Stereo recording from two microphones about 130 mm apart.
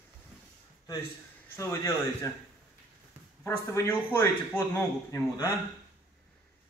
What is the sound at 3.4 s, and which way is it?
A man's voice, 20° left (ahead or behind).